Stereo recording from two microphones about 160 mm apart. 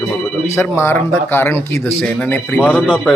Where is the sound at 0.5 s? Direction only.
15° left (ahead or behind).